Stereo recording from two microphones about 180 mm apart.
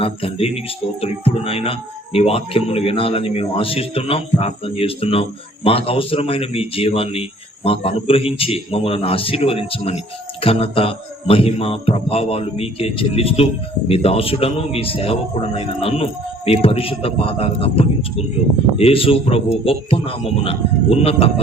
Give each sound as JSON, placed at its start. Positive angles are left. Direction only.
{"t": 0.0, "sound": "speech", "side_deg": 30}